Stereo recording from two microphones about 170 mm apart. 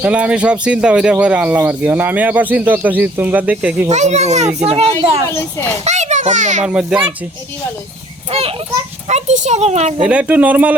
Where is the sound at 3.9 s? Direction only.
40° right (ahead or behind).